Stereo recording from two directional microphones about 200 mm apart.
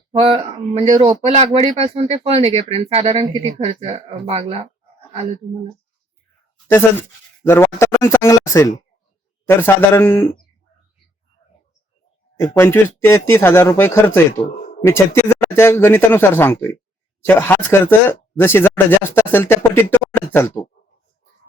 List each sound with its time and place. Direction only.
0.1 s speech: 30° right (ahead or behind)
7.4 s speech: 10° left (ahead or behind)
12.4 s speech: 10° left (ahead or behind)